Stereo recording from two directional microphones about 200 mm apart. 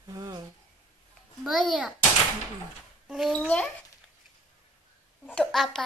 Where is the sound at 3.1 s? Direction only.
Centre (ahead or behind).